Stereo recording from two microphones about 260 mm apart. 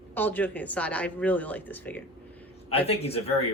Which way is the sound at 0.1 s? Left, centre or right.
Centre.